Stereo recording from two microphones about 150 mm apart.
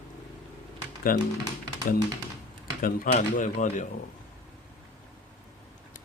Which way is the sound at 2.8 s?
70° left (ahead or behind).